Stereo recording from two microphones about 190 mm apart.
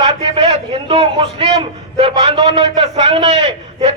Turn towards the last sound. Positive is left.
turn(degrees=-30)  # may be behind; listen again after turning